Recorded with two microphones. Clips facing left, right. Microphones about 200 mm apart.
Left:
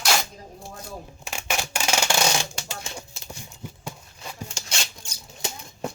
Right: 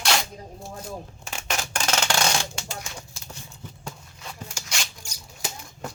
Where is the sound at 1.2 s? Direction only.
10° left (ahead or behind).